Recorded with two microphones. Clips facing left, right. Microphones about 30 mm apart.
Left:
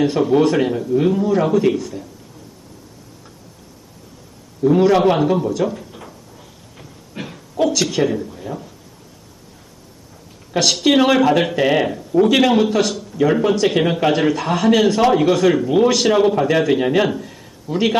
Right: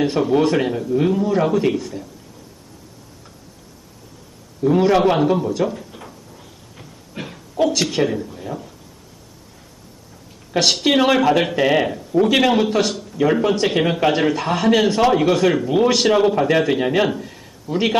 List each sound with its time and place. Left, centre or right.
0.2 s speech: centre
4.6 s speech: centre
5.6 s drawer open or close: centre
6.7 s a sound: centre
7.7 s speech: centre
8.0 s speech: centre
10.5 s a woman's voice: centre
15.9 s speech: centre
16.1 s speech: centre